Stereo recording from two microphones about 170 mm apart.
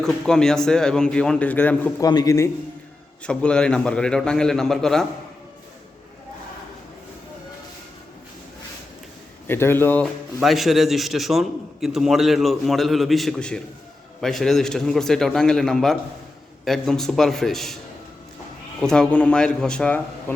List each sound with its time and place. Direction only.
0.0 s speech: 5° left (ahead or behind)
2.0 s a man's voice: 20° left (ahead or behind)
3.2 s speech: 5° left (ahead or behind)
9.5 s speech: 15° left (ahead or behind)
18.8 s speech: 5° left (ahead or behind)